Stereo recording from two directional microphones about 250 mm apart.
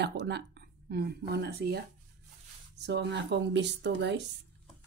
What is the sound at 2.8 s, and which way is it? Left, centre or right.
Speech, right.